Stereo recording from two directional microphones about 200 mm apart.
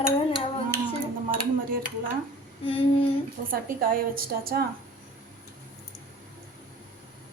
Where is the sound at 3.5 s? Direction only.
45° right (ahead or behind).